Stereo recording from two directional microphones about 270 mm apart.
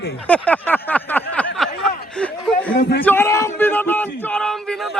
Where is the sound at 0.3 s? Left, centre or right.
Centre.